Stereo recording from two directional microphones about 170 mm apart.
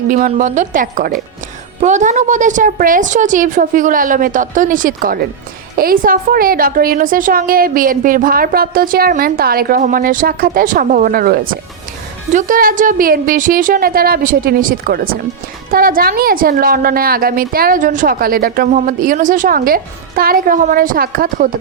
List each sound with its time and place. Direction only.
0.3 s a woman's voice: 45° right (ahead or behind); by 11.5 s 65° right (ahead or behind)
12.3 s a woman's voice: 50° right (ahead or behind)